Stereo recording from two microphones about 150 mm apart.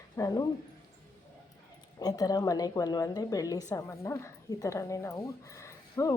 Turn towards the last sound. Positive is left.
turn(degrees=20)  # may be behind; listen again after turning